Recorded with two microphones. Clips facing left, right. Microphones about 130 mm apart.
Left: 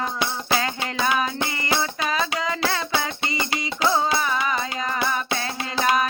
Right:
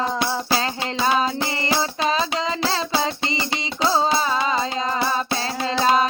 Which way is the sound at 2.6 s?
25° right (ahead or behind).